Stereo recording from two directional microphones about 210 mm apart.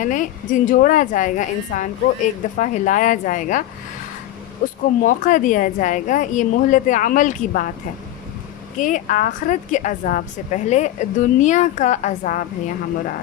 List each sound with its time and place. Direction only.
0.0 s a woman's voice: 40° left (ahead or behind)
4.6 s a woman's voice: 40° left (ahead or behind)
8.8 s a woman's voice: 40° left (ahead or behind)